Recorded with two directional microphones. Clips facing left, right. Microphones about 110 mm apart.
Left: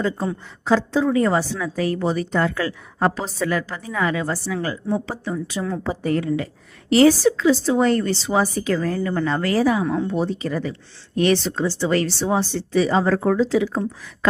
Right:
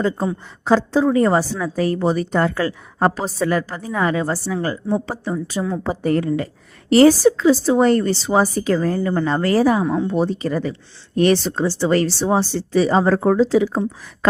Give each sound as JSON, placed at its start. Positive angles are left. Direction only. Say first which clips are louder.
{"t": 0.6, "sound": "a woman's voice", "louder": "right 3 dB", "side_deg": -35}
{"t": 9.8, "sound": "speech", "louder": "right 2 dB", "side_deg": -15}
{"t": 10.1, "sound": "a woman's voice", "louder": "right 3 dB", "side_deg": -40}